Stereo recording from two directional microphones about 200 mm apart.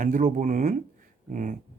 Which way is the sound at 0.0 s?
40° right (ahead or behind).